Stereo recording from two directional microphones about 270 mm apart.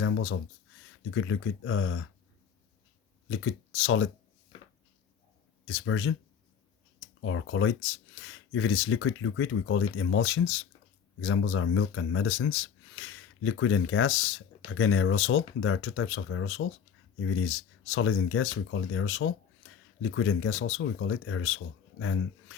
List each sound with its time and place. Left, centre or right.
0.0 s a sound: left
1.1 s speech: left
3.2 s speech: left
5.6 s speech: left